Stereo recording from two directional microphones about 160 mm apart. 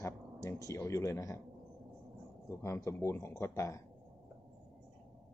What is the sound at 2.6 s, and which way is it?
Speech, 15° left (ahead or behind).